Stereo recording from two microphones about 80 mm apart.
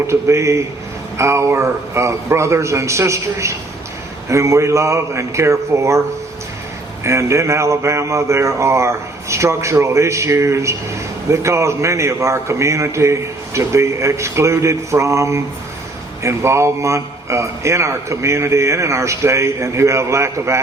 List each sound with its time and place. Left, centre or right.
0.1 s speech: right
7.0 s speech: right